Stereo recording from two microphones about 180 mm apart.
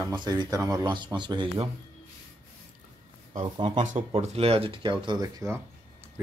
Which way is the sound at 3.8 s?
40° right (ahead or behind).